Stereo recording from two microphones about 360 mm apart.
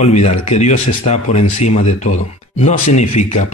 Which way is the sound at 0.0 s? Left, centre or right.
Centre.